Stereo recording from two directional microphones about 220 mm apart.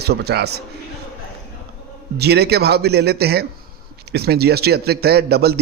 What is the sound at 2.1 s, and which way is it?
A man's voice, 50° right (ahead or behind).